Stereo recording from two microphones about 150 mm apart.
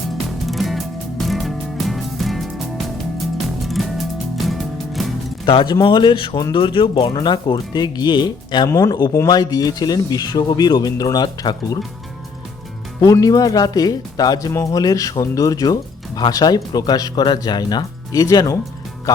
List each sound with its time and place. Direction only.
0.4 s music: centre (ahead or behind)
3.6 s music: centre (ahead or behind)
5.5 s speech: 35° left (ahead or behind)
13.0 s speech: 20° left (ahead or behind)